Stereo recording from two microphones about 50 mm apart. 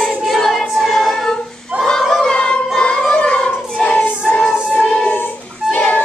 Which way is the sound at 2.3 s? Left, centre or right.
Centre.